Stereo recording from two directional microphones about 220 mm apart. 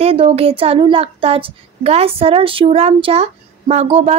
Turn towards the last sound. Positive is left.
turn(degrees=-25)  # may be behind; listen again after turning